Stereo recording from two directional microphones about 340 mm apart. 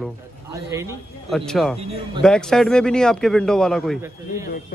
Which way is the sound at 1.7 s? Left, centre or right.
Centre.